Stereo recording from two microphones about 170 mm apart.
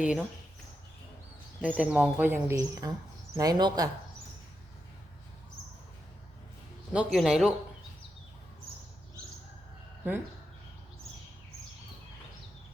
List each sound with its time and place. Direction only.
0.0 s speech: 5° right (ahead or behind)
1.6 s speech: 10° right (ahead or behind); by 3.8 s 25° right (ahead or behind)
6.9 s speech: 5° right (ahead or behind)
10.0 s speech: 10° right (ahead or behind)